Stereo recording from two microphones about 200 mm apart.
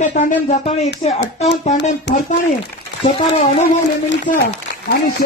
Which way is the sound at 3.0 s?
30° left (ahead or behind).